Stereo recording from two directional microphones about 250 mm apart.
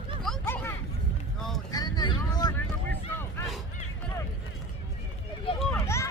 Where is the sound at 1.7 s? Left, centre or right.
Centre.